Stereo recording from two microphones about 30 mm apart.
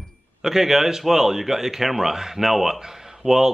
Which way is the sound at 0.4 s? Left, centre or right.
Centre.